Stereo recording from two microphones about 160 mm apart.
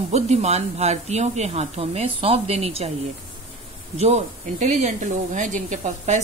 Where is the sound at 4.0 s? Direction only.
45° right (ahead or behind).